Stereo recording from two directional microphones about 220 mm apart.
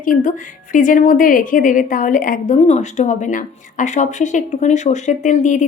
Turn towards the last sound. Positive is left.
turn(degrees=35)  # may be behind; listen again after turning